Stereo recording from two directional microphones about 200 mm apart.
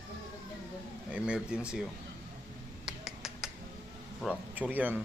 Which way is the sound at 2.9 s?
Centre (ahead or behind).